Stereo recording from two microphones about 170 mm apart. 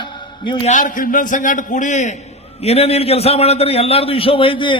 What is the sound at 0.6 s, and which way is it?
A man's voice, 50° left (ahead or behind).